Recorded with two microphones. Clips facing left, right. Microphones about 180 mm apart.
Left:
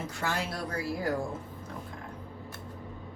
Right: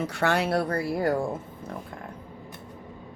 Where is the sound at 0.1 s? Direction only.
70° right (ahead or behind).